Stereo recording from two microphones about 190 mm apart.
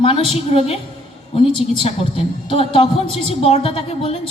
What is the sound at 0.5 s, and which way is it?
Speech, 30° left (ahead or behind).